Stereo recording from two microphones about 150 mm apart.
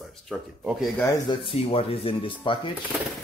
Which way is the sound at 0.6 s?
5° right (ahead or behind).